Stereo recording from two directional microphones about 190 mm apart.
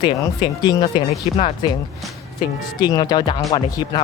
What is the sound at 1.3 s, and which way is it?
Speech, 35° left (ahead or behind).